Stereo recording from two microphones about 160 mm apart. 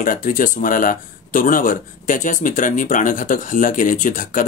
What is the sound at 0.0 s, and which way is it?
Speech, 55° left (ahead or behind).